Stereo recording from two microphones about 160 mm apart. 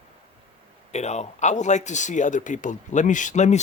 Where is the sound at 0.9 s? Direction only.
45° left (ahead or behind).